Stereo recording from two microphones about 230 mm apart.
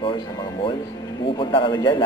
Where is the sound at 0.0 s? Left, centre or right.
Left.